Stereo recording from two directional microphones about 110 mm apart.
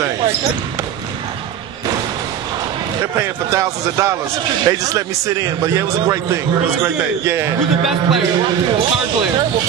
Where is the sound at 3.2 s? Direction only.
30° right (ahead or behind).